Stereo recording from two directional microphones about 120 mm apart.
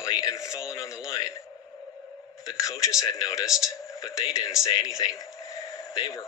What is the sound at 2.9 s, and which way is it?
Speech, 30° left (ahead or behind).